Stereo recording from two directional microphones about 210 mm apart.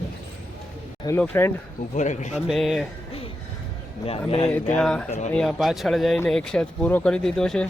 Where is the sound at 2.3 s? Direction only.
Centre (ahead or behind).